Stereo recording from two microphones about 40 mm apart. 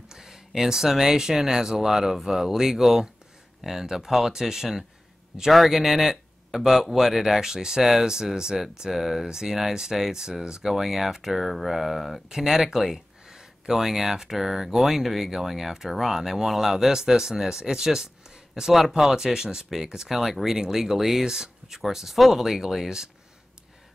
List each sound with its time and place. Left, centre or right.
0.1 s a sound: centre
0.6 s speech: centre
12.3 s speech: centre